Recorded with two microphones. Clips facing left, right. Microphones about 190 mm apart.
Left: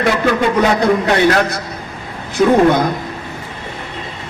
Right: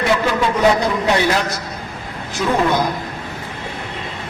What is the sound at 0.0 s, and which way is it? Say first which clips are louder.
Speech: left 3 dB; 55° left (ahead or behind).